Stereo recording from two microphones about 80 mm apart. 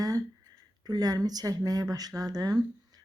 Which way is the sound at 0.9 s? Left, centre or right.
Right.